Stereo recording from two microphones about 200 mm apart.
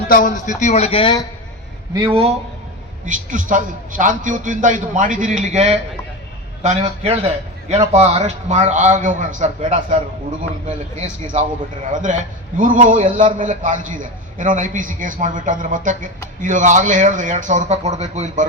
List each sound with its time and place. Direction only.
0.1 s a man's voice: 40° left (ahead or behind); by 1.2 s 25° left (ahead or behind)
1.9 s a man's voice: 25° right (ahead or behind)
3.1 s a man's voice: 40° right (ahead or behind)